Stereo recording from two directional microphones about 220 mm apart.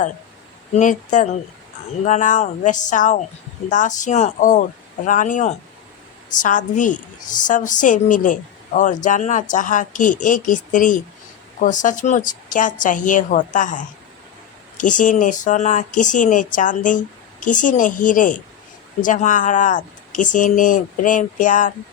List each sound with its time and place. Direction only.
0.7 s speech: 35° left (ahead or behind)